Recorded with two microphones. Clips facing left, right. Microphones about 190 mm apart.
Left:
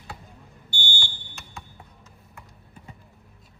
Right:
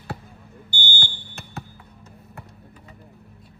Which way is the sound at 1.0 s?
60° right (ahead or behind).